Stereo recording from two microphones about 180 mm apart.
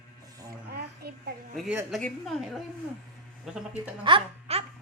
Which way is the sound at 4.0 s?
30° right (ahead or behind).